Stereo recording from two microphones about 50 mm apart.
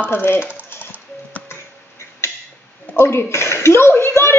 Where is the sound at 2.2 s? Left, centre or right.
Left.